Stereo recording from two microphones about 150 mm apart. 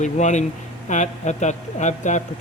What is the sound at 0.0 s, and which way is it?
A man's voice, 50° left (ahead or behind).